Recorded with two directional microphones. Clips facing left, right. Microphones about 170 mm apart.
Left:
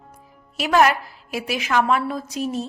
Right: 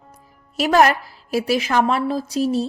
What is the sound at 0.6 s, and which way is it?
A woman's voice, 40° right (ahead or behind).